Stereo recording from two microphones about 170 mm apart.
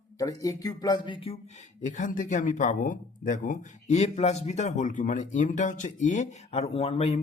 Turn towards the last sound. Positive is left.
turn(degrees=35)  # may be behind; listen again after turning